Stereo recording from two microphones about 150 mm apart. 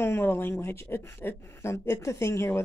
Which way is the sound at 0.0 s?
15° left (ahead or behind).